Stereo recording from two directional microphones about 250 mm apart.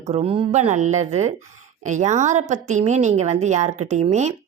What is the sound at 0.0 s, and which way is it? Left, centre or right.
A woman's voice, right.